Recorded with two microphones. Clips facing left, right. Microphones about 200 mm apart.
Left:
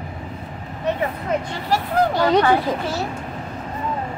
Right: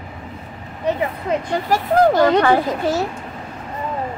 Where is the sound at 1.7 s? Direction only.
45° right (ahead or behind).